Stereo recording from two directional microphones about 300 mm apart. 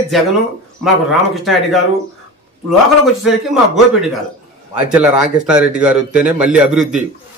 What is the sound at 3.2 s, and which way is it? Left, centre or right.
A man's voice, centre.